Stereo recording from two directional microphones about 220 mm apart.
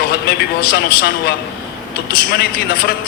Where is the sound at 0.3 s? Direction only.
45° left (ahead or behind).